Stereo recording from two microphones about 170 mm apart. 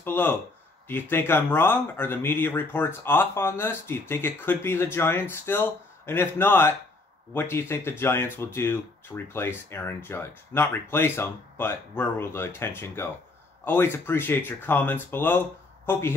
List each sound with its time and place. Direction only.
0.0 s speech: 10° left (ahead or behind)